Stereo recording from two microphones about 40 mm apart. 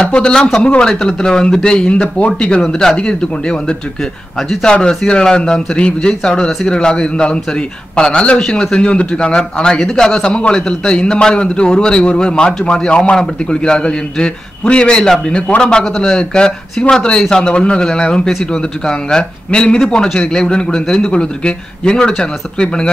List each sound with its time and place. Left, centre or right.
0.0 s a man's voice: left
2.7 s a man's voice: centre
3.0 s a man's voice: left
4.4 s a man's voice: centre
4.6 s a man's voice: left
9.8 s a man's voice: centre